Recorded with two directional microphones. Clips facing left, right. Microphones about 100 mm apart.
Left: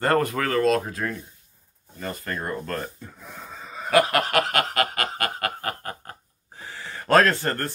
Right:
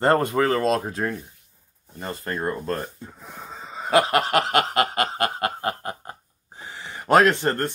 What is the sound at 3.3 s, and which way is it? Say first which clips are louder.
Snicker: right 2 dB; 20° right (ahead or behind).